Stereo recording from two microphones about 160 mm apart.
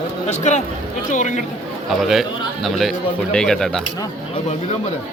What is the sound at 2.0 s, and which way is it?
A man's voice, centre (ahead or behind).